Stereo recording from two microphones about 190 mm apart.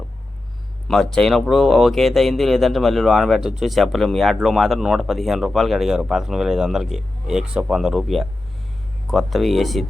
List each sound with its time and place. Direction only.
0.9 s speech: 5° left (ahead or behind)